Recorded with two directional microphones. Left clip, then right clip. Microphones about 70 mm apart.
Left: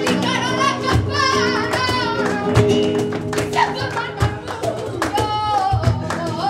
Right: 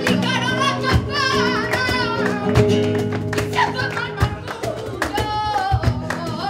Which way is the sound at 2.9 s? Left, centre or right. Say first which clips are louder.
Left 2 dB; left.